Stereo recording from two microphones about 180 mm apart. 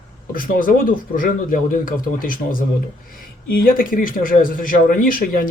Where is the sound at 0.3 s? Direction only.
50° left (ahead or behind).